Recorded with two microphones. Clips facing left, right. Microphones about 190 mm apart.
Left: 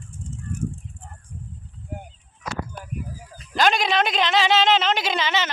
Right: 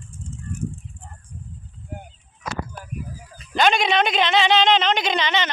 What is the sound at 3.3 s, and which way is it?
Speech, centre (ahead or behind).